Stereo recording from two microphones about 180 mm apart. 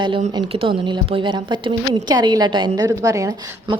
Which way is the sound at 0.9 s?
25° right (ahead or behind).